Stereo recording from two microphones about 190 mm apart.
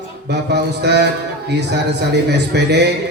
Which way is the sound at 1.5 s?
65° right (ahead or behind).